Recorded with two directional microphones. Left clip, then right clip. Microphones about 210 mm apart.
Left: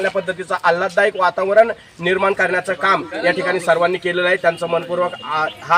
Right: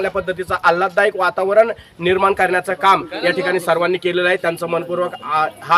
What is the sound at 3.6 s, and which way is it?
Speech, 10° right (ahead or behind).